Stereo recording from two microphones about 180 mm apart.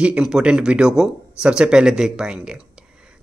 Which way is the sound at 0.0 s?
5° right (ahead or behind).